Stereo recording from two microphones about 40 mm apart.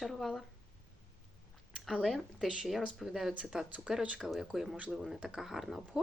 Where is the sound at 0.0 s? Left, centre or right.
Centre.